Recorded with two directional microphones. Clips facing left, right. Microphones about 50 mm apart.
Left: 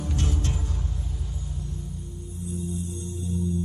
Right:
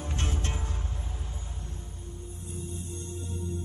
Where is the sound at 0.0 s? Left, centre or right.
Right.